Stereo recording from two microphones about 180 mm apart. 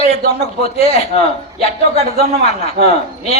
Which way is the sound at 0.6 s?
35° left (ahead or behind).